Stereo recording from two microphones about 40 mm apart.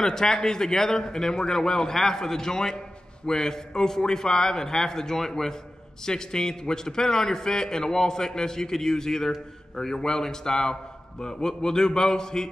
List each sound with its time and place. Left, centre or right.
0.0 s a man's voice: centre